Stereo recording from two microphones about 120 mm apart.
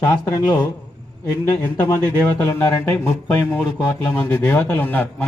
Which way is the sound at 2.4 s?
25° left (ahead or behind).